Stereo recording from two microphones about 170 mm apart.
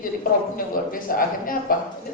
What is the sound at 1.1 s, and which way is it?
Speech, 55° left (ahead or behind).